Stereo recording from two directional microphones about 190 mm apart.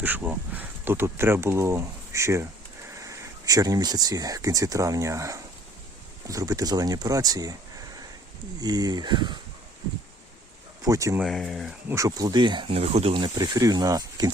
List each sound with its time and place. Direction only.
0.0 s speech: 10° right (ahead or behind)
8.6 s speech: 20° right (ahead or behind)
10.8 s speech: 15° right (ahead or behind)
11.2 s speech: centre (ahead or behind)
11.9 s speech: 15° right (ahead or behind)